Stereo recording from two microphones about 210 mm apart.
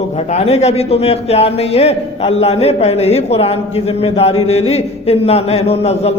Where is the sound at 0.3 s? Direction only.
30° left (ahead or behind).